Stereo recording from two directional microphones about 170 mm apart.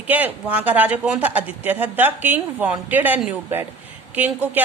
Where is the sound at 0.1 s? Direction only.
10° right (ahead or behind).